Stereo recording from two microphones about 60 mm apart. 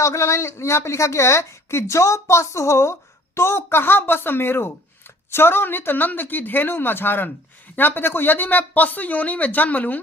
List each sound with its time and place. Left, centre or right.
0.0 s a woman's voice: left